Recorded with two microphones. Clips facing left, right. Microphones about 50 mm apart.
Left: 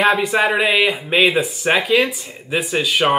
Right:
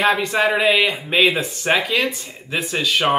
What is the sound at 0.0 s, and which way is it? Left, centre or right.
Speech, centre.